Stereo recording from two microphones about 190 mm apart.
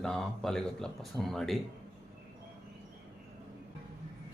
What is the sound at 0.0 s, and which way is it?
Speech, centre (ahead or behind).